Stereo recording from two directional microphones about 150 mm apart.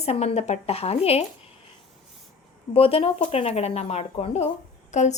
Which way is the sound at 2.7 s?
40° left (ahead or behind).